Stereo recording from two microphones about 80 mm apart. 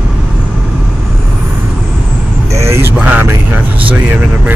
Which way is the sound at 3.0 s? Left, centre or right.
Centre.